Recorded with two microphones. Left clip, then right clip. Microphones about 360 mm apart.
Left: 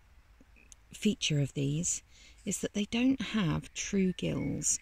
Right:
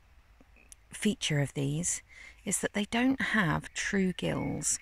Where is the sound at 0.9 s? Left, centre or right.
Centre.